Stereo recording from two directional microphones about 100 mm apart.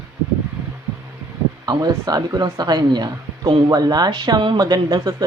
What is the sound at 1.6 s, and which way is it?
Speech, 40° right (ahead or behind).